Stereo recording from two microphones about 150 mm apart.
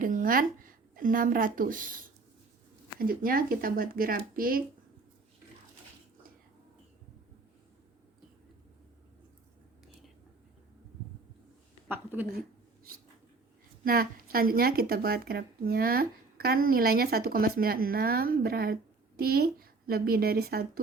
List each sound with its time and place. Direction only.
0.0 s a woman's voice: 65° right (ahead or behind)
3.0 s speech: 75° right (ahead or behind)
13.8 s a woman's voice: 80° right